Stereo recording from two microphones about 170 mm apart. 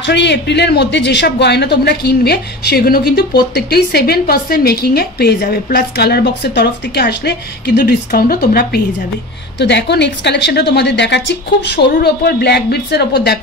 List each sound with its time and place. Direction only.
0.0 s speech: 90° left; by 8.8 s 60° left (ahead or behind)
9.6 s speech: 90° left; by 13.4 s 75° left (ahead or behind)